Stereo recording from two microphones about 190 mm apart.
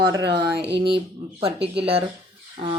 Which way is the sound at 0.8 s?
30° right (ahead or behind).